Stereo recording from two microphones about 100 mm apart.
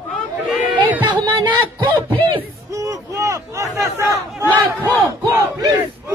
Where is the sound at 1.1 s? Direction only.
45° right (ahead or behind).